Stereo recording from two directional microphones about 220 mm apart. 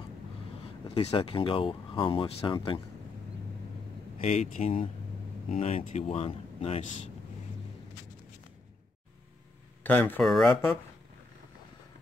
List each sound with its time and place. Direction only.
0.8 s speech: 25° left (ahead or behind)
4.2 s speech: 35° left (ahead or behind)
9.8 s speech: 10° left (ahead or behind)